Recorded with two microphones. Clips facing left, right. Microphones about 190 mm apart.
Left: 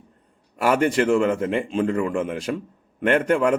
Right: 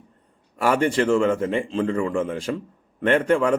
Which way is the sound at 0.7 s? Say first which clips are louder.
Left 1 dB; 5° left (ahead or behind).